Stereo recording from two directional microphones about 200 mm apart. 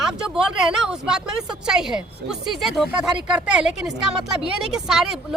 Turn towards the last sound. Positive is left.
turn(degrees=0)  # may be behind; listen again after turning